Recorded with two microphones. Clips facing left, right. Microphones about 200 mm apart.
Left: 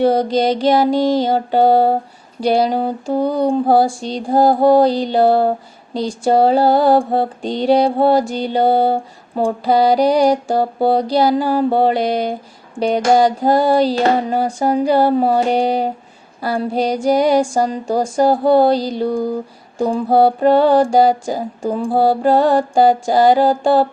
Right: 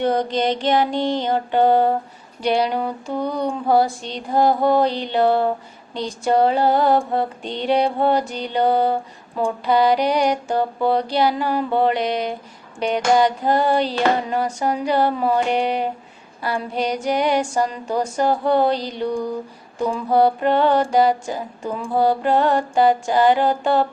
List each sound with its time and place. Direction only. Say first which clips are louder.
0.0 s mantra: left 5 dB; 35° left (ahead or behind)